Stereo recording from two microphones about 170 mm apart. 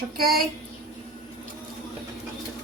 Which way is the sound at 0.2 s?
60° right (ahead or behind).